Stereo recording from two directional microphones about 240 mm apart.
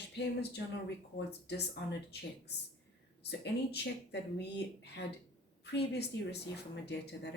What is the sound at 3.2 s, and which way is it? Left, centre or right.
Speech, left.